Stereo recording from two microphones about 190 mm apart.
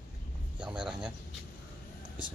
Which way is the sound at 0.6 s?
5° right (ahead or behind).